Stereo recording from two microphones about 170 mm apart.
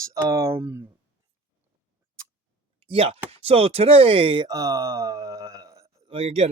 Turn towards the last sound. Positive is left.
turn(degrees=-40)  # may be behind; listen again after turning